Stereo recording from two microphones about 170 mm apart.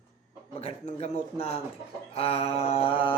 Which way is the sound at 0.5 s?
40° left (ahead or behind).